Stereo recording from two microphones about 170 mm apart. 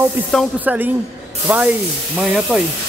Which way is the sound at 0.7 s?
10° right (ahead or behind).